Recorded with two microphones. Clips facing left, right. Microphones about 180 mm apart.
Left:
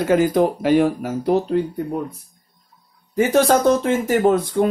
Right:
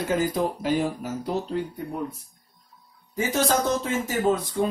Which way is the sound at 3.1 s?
60° left (ahead or behind).